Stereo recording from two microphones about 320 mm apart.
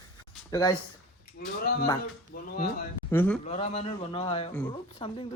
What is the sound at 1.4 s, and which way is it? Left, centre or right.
Speech, left.